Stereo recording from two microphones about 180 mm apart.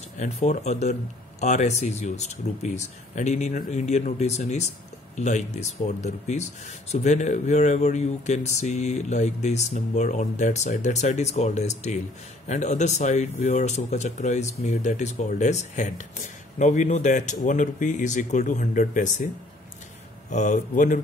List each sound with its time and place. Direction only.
0.2 s speech: 40° left (ahead or behind)
20.2 s speech: 40° left (ahead or behind)